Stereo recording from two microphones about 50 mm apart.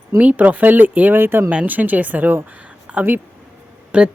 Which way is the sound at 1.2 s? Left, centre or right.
Right.